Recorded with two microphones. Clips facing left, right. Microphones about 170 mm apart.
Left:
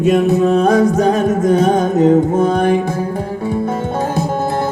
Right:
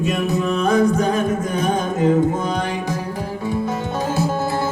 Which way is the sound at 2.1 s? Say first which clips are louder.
Left 3 dB; 55° left (ahead or behind).